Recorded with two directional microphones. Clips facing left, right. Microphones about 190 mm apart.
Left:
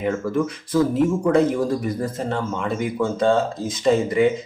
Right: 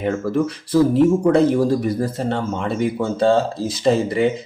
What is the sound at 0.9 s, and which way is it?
Speech, 35° right (ahead or behind).